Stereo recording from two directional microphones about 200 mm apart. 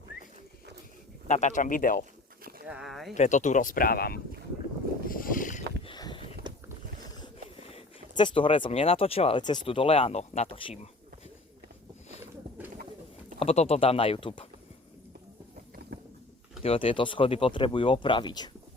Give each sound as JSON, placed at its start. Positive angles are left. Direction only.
{"t": 1.3, "sound": "speech", "side_deg": 35}
{"t": 2.6, "sound": "a sound", "side_deg": 0}
{"t": 3.2, "sound": "speech", "side_deg": 35}
{"t": 5.0, "sound": "boat", "side_deg": 45}
{"t": 5.9, "sound": "a sound", "side_deg": 25}
{"t": 6.5, "sound": "clip-clop", "side_deg": -20}
{"t": 7.7, "sound": "speech", "side_deg": 25}
{"t": 12.2, "sound": "a sound", "side_deg": -10}
{"t": 13.4, "sound": "speech", "side_deg": 30}
{"t": 16.6, "sound": "speech", "side_deg": 25}